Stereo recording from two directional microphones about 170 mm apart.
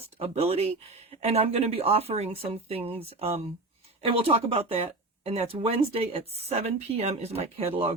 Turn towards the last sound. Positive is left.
turn(degrees=-35)  # may be behind; listen again after turning